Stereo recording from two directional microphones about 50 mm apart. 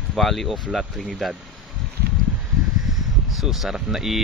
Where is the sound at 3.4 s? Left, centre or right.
Centre.